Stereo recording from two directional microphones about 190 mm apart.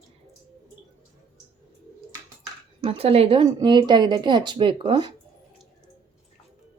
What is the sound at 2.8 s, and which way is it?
Speech, 30° right (ahead or behind).